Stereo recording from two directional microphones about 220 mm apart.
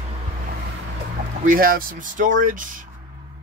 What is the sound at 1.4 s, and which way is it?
Speech, 40° right (ahead or behind).